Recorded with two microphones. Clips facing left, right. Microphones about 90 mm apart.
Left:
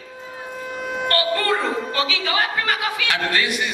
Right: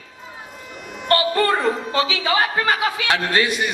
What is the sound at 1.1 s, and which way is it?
Speech, 25° right (ahead or behind).